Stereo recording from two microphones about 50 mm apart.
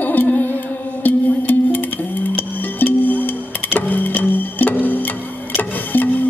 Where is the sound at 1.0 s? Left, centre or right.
Left.